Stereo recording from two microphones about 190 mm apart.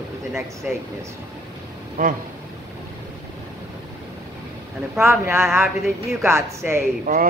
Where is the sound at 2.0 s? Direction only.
45° right (ahead or behind).